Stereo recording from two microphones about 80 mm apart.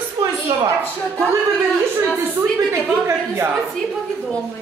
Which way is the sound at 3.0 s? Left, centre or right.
Right.